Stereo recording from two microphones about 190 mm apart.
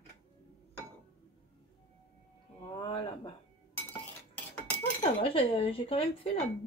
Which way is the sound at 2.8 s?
25° left (ahead or behind).